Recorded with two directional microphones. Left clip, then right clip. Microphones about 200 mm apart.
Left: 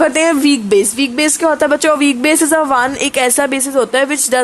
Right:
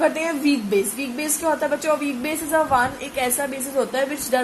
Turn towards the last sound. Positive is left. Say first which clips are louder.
# left 8 dB
turn(degrees=55)  # may be behind; listen again after turning